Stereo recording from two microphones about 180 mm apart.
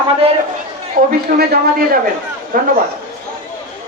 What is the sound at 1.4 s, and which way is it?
A man's voice, 60° right (ahead or behind).